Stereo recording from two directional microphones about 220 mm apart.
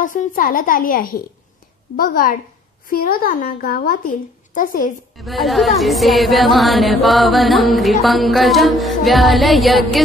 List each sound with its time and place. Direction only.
0.0 s speech: 40° left (ahead or behind)
5.1 s music: centre (ahead or behind)